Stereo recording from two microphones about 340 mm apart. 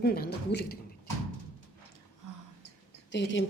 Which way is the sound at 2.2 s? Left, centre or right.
Right.